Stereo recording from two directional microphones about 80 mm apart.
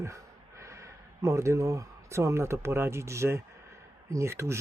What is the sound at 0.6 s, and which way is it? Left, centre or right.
Speech, right.